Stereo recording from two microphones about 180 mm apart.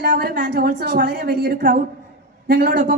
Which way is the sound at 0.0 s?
60° right (ahead or behind).